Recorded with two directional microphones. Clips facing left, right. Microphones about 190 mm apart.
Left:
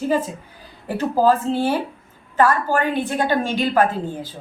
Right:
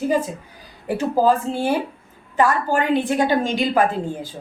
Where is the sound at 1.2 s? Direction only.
15° right (ahead or behind).